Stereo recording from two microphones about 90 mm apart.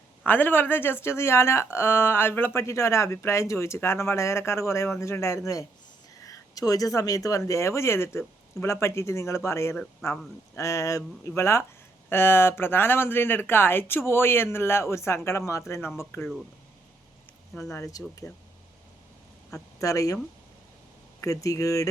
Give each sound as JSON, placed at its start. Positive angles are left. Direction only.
{"t": 0.3, "sound": "speech", "side_deg": 20}
{"t": 6.2, "sound": "speech", "side_deg": 45}
{"t": 17.6, "sound": "speech", "side_deg": 35}
{"t": 19.8, "sound": "speech", "side_deg": 35}
{"t": 21.2, "sound": "speech", "side_deg": 35}